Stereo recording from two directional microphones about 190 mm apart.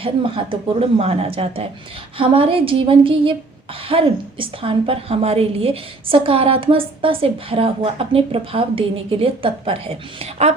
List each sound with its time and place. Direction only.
0.7 s a woman's voice: 30° right (ahead or behind)